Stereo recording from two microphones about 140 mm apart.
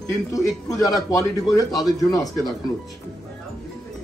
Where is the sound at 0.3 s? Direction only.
25° left (ahead or behind).